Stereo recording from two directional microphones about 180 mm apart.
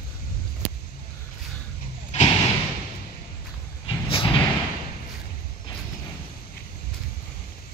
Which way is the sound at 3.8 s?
30° left (ahead or behind).